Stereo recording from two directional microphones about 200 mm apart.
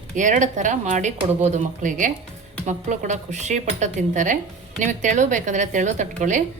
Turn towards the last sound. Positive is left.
turn(degrees=-35)  # may be behind; listen again after turning